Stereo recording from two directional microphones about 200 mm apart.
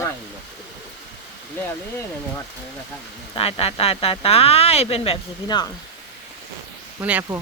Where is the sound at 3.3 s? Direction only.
30° left (ahead or behind).